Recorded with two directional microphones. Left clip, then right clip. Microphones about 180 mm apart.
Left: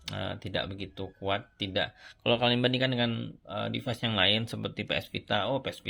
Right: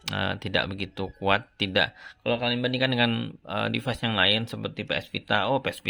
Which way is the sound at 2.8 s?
25° right (ahead or behind).